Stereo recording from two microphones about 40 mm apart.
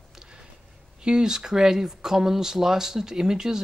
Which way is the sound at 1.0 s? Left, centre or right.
Centre.